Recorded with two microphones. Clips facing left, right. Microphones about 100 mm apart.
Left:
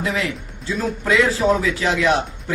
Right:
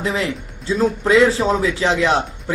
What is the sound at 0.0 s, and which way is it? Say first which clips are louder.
A man's voice: right 2 dB; 30° right (ahead or behind).